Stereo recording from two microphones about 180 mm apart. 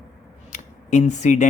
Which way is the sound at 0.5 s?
45° left (ahead or behind).